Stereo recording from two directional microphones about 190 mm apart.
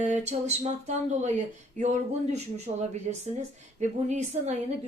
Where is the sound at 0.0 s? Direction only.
35° right (ahead or behind).